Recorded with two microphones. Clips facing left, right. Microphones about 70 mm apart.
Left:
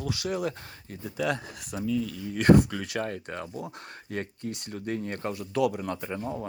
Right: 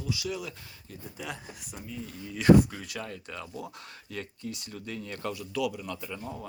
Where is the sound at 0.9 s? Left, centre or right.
Left.